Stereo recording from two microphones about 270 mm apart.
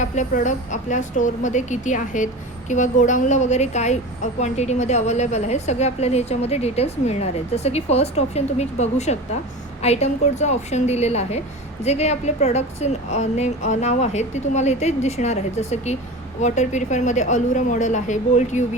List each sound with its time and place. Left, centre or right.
0.0 s a woman's voice: left